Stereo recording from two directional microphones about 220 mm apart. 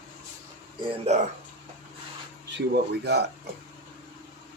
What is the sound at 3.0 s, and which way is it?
Speech, 50° right (ahead or behind).